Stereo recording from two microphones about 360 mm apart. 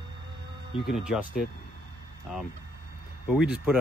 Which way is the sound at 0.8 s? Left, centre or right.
Centre.